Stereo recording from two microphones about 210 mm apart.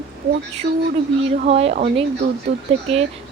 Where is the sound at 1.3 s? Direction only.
30° right (ahead or behind).